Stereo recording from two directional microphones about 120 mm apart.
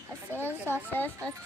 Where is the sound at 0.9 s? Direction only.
15° left (ahead or behind).